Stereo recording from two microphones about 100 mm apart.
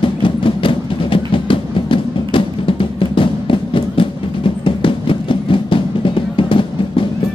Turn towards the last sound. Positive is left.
turn(degrees=60)  # may be behind; listen again after turning